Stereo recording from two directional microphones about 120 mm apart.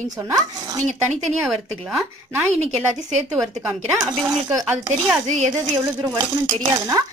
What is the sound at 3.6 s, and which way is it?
Speech, 25° right (ahead or behind).